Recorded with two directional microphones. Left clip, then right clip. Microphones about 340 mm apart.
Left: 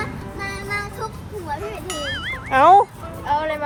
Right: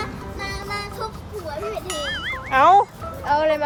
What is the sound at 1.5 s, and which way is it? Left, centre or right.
Speech, centre.